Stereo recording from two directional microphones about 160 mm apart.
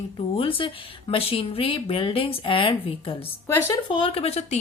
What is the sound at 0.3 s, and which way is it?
Speech, 35° left (ahead or behind).